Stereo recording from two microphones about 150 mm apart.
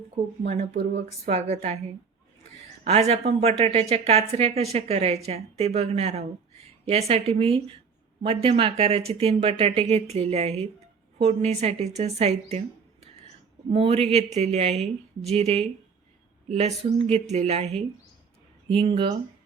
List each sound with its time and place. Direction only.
0.4 s a woman's voice: 45° right (ahead or behind)
2.8 s a woman's voice: 45° right (ahead or behind)
13.7 s a woman's voice: 40° right (ahead or behind)